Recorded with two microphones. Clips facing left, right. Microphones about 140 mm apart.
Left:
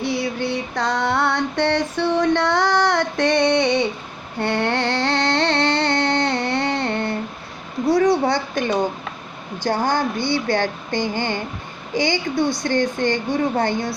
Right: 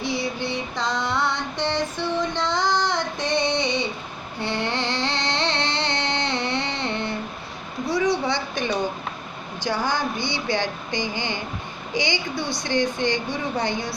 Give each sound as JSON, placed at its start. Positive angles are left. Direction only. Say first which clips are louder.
{"t": 0.0, "sound": "female singing", "louder": "left 4 dB", "side_deg": 60}
{"t": 4.4, "sound": "music", "louder": "left 5 dB", "side_deg": 60}
{"t": 7.9, "sound": "a sound", "louder": "left 6 dB", "side_deg": 50}
{"t": 8.5, "sound": "speech", "louder": "left 4 dB", "side_deg": 45}